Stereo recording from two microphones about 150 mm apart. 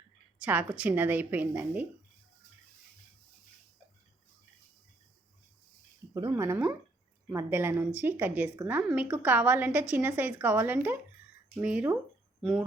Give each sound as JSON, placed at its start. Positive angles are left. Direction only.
{"t": 0.3, "sound": "a woman's voice", "side_deg": -10}
{"t": 6.1, "sound": "a woman's voice", "side_deg": -20}